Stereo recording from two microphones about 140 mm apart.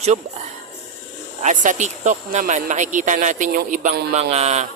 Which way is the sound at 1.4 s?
60° right (ahead or behind).